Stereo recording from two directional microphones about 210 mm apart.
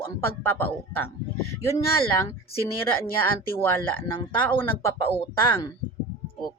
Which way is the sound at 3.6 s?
10° left (ahead or behind).